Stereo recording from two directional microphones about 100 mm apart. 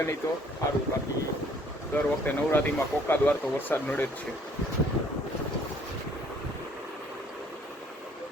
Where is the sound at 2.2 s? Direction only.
15° left (ahead or behind).